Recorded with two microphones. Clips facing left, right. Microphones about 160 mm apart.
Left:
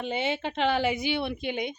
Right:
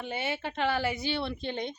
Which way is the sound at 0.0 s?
20° left (ahead or behind).